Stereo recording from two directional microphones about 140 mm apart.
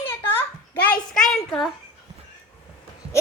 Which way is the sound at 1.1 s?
5° left (ahead or behind).